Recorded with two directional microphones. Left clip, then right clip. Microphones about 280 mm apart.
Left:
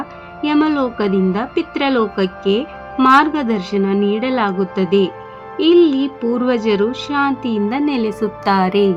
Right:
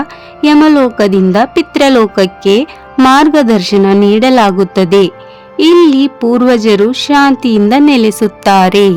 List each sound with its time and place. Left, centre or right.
0.4 s speech: right